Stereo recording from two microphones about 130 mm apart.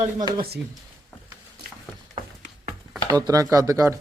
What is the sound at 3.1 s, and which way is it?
Speech, 30° right (ahead or behind).